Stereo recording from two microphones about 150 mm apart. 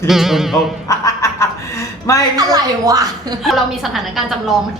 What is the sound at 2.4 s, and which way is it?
Speech, 25° right (ahead or behind).